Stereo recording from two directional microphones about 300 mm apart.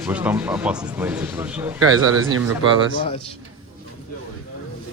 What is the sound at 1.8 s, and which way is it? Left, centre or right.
Speech, right.